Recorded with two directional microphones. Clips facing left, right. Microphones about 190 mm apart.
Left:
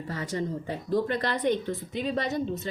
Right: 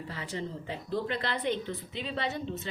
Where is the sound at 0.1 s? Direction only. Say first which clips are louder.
Left 7 dB; 45° left (ahead or behind).